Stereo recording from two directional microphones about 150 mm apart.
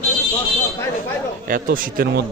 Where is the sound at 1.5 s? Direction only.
70° right (ahead or behind).